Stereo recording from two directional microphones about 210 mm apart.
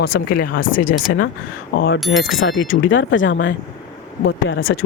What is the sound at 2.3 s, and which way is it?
Speech, 65° left (ahead or behind).